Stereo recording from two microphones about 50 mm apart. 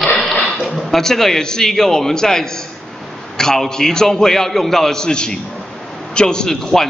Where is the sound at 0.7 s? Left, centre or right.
Centre.